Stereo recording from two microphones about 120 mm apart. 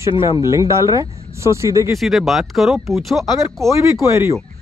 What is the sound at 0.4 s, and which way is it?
Speech, 25° right (ahead or behind).